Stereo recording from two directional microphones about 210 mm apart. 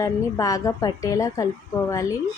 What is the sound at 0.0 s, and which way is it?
A woman's voice, 15° left (ahead or behind).